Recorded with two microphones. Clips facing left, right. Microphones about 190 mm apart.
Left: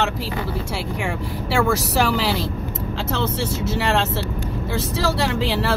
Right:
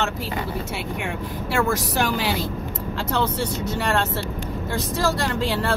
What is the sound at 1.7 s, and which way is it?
Speech, 70° left (ahead or behind).